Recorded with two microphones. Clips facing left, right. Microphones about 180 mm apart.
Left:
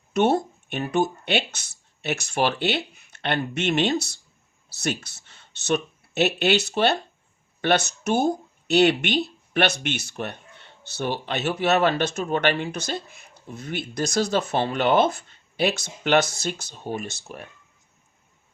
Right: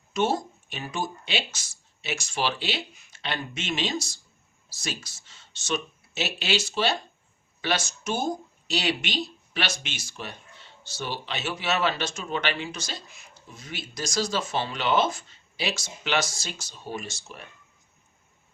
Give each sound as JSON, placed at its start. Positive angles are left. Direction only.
{"t": 0.1, "sound": "speech", "side_deg": 60}